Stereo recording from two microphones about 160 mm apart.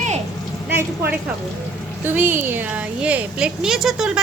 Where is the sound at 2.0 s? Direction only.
15° right (ahead or behind).